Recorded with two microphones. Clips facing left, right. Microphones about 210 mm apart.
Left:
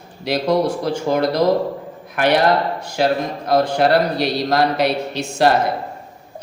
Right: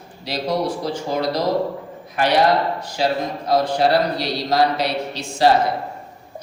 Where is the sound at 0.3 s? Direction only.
55° left (ahead or behind).